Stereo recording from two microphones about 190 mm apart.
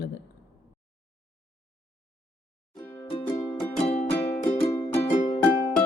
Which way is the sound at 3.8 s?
35° left (ahead or behind).